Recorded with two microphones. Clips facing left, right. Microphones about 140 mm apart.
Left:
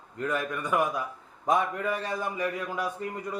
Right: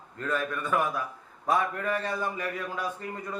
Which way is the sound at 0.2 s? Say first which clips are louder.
Left 1 dB; 15° left (ahead or behind).